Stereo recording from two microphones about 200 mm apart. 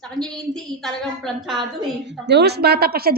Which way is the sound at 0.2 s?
Centre (ahead or behind).